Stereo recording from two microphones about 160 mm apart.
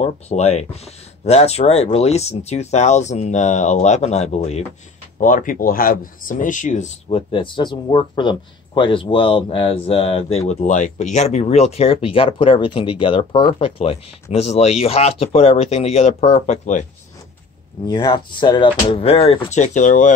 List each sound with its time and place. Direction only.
0.0 s speech: 45° left (ahead or behind)
5.2 s speech: 55° left (ahead or behind)
17.8 s speech: 25° left (ahead or behind); by 20.1 s 50° left (ahead or behind)